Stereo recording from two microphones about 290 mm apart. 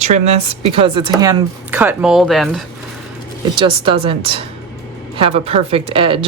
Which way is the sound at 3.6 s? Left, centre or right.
Centre.